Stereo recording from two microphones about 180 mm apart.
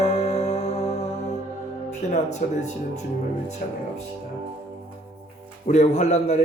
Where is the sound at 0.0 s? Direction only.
35° left (ahead or behind).